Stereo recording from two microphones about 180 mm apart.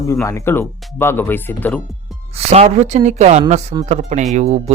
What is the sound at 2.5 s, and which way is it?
Speech, 35° right (ahead or behind).